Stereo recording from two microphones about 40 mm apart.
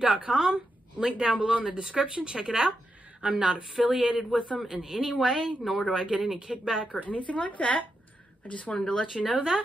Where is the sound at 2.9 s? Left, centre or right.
Right.